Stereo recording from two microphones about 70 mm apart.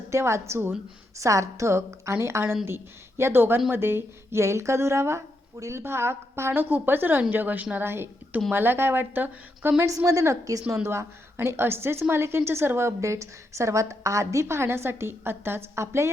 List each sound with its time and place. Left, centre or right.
0.1 s speech: right
10.1 s a woman's voice: right
10.8 s speech: right